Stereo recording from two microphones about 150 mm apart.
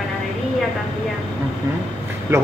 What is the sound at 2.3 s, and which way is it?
Speech, 20° right (ahead or behind).